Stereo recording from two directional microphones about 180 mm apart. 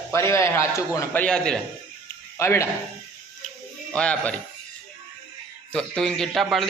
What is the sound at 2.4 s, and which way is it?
Speech, 15° left (ahead or behind).